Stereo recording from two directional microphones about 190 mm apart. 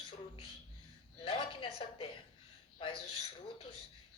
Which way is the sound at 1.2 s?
25° left (ahead or behind).